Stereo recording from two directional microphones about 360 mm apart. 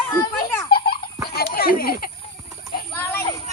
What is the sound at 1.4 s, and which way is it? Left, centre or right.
Speech, left.